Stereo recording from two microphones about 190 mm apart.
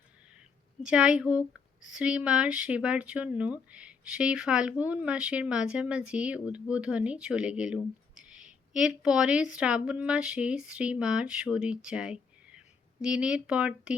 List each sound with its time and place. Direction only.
0.9 s speech: 5° right (ahead or behind)